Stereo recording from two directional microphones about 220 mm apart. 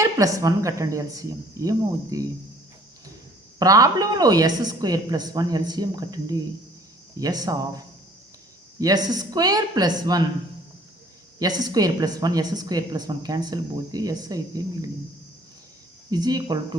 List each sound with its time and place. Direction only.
0.0 s a woman's voice: 15° right (ahead or behind)
3.6 s a woman's voice: 15° right (ahead or behind)
8.8 s a woman's voice: 15° right (ahead or behind)
11.3 s a woman's voice: 15° right (ahead or behind)
16.0 s a woman's voice: 15° right (ahead or behind)